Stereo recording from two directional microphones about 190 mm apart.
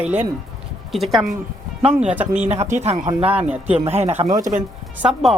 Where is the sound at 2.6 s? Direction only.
35° right (ahead or behind).